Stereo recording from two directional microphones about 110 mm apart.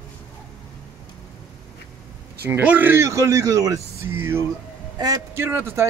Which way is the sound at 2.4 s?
15° right (ahead or behind).